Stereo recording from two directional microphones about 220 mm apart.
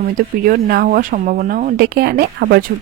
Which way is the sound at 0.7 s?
45° right (ahead or behind).